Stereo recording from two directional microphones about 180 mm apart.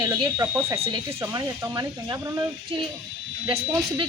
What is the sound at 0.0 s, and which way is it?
Speech, 20° right (ahead or behind).